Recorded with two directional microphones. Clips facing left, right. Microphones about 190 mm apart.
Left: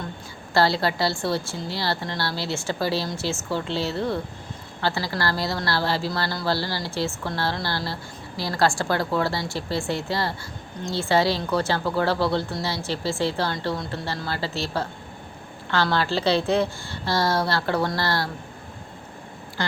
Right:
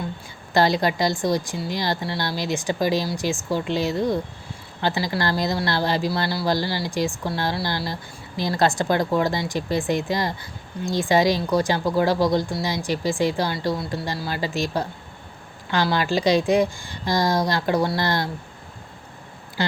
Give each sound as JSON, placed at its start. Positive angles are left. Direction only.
{"t": 0.5, "sound": "a woman's voice", "side_deg": -15}